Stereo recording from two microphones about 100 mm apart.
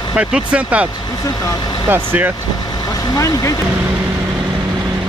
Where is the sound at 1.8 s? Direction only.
20° right (ahead or behind).